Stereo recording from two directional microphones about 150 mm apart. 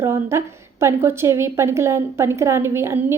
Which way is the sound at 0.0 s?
15° right (ahead or behind).